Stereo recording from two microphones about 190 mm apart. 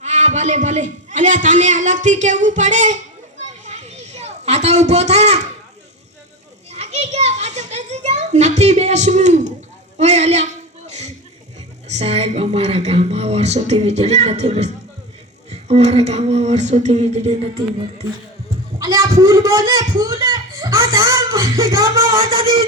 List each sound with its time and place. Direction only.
0.0 s a man's voice: 35° right (ahead or behind)
3.6 s a sound: 35° right (ahead or behind)
6.7 s a child's voice: 35° right (ahead or behind)
10.0 s a sound: 35° right (ahead or behind)
11.9 s a man's voice: 35° right (ahead or behind)
18.8 s speech: 20° right (ahead or behind)